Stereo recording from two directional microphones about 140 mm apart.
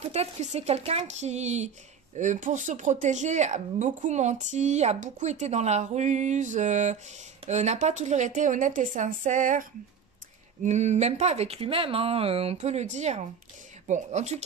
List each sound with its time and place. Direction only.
0.0 s speech: 50° right (ahead or behind); by 9.7 s 65° right (ahead or behind)
10.6 s speech: 55° right (ahead or behind)